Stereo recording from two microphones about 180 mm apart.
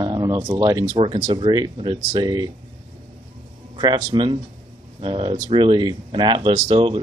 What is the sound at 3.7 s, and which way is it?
Speech, 25° right (ahead or behind).